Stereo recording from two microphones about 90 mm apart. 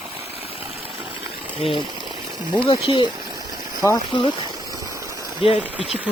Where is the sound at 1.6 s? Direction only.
70° left (ahead or behind).